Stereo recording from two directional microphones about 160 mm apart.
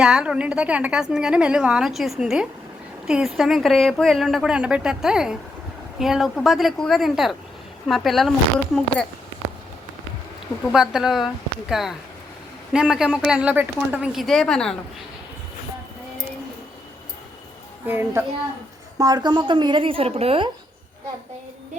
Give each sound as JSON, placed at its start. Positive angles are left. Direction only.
{"t": 0.0, "sound": "a woman's voice", "side_deg": -5}
{"t": 10.7, "sound": "a woman's voice", "side_deg": -5}
{"t": 17.8, "sound": "a child's voice", "side_deg": -15}
{"t": 18.9, "sound": "speech", "side_deg": -25}